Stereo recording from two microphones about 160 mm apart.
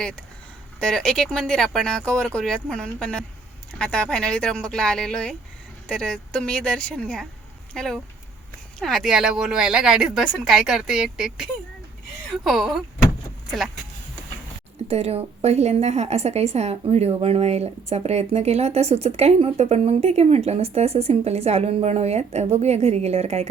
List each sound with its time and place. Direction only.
0.8 s speech: 5° left (ahead or behind)
14.8 s speech: 40° right (ahead or behind)